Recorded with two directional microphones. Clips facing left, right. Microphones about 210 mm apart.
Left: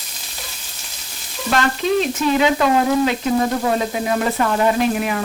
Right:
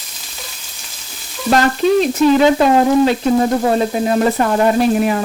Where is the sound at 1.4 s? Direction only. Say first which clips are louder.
Right 5 dB; 35° right (ahead or behind).